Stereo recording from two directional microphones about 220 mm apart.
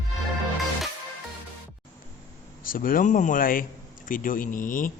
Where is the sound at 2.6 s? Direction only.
40° left (ahead or behind).